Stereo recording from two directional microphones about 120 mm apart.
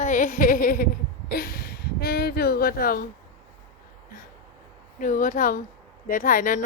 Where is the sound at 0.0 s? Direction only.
90° left.